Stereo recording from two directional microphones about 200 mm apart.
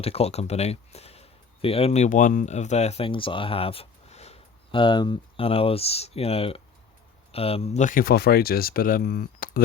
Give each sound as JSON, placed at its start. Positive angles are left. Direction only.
{"t": 0.0, "sound": "speech", "side_deg": 30}